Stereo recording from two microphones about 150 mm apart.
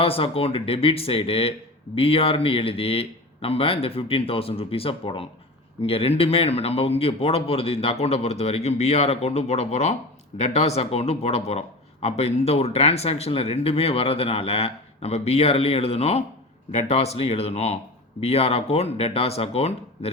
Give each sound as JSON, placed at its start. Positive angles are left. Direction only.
{"t": 0.0, "sound": "a man's voice", "side_deg": 40}